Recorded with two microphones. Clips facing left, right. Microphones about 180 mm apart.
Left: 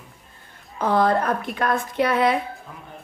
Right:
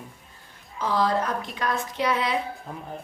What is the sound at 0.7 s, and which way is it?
A woman's voice, 55° left (ahead or behind).